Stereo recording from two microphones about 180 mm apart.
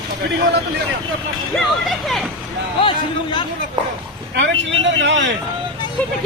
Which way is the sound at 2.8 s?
25° left (ahead or behind).